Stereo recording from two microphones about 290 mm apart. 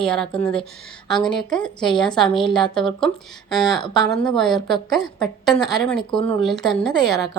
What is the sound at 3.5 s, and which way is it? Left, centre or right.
Speech, centre.